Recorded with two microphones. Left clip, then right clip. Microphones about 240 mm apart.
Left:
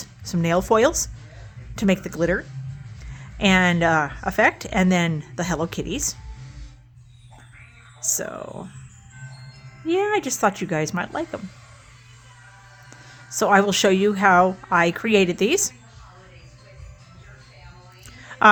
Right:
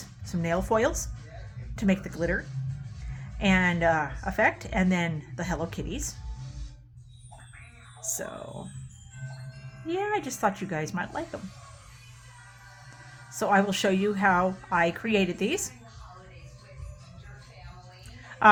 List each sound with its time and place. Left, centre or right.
0.3 s speech: left
8.0 s speech: left
9.8 s speech: left
13.3 s speech: left
18.2 s a sound: left